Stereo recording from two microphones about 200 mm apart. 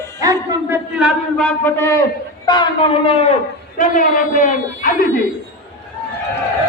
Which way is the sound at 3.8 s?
40° left (ahead or behind).